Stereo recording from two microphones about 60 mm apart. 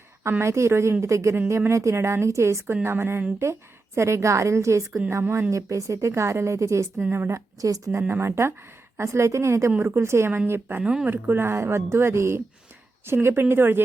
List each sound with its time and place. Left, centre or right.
0.2 s a woman's voice: right
2.8 s speech: right
3.9 s a woman's voice: right
8.2 s speech: right